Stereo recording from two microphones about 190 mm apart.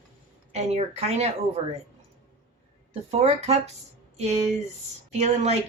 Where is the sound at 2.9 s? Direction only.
35° right (ahead or behind).